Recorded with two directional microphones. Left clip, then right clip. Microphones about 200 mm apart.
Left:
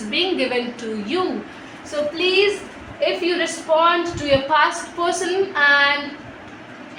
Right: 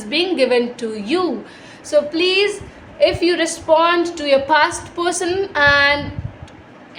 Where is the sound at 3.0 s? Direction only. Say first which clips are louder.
Right 5 dB; 60° right (ahead or behind).